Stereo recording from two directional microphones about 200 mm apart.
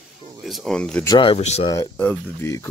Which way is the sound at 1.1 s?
25° left (ahead or behind).